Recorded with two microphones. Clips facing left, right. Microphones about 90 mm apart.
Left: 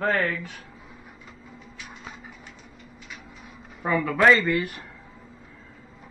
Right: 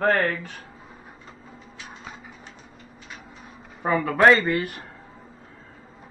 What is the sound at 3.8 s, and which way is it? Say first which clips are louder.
Speech: right 1 dB; 35° right (ahead or behind).